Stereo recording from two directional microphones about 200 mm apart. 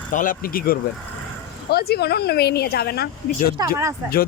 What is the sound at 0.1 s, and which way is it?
A woman's voice, 40° left (ahead or behind).